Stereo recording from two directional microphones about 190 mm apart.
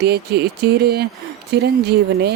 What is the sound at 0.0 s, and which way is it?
Speech, 60° right (ahead or behind).